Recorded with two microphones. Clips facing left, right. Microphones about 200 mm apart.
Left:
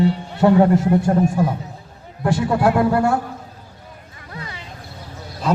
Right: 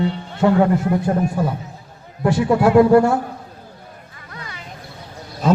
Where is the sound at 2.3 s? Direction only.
55° left (ahead or behind).